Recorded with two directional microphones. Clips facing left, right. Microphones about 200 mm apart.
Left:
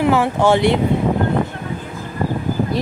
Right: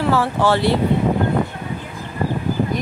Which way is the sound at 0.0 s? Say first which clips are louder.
Left 3 dB; 15° left (ahead or behind).